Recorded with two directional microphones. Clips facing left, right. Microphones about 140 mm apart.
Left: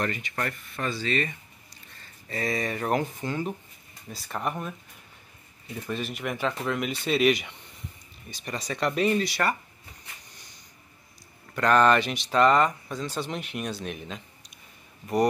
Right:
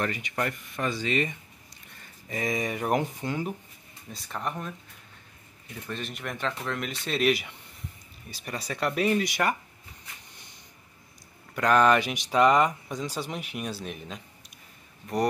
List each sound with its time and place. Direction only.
0.0 s speech: 10° right (ahead or behind)
4.1 s speech: 5° left (ahead or behind)
5.9 s speech: 5° left (ahead or behind)
9.2 s speech: 15° right (ahead or behind)
11.5 s speech: 5° right (ahead or behind)